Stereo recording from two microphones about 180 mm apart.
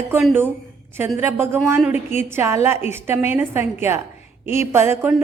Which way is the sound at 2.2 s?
15° right (ahead or behind).